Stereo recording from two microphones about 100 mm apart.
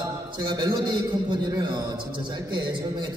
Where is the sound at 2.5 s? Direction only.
50° right (ahead or behind).